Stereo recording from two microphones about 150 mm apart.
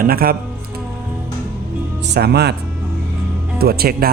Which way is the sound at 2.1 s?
90° right.